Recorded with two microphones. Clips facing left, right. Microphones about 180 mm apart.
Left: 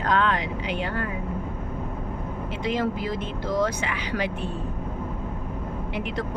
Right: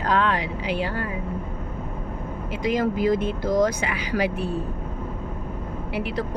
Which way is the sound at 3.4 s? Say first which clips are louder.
Right 4 dB; 40° right (ahead or behind).